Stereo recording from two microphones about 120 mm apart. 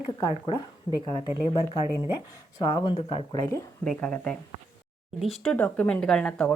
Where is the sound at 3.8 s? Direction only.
10° left (ahead or behind).